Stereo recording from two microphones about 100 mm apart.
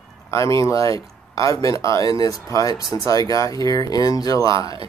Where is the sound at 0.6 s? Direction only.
35° left (ahead or behind).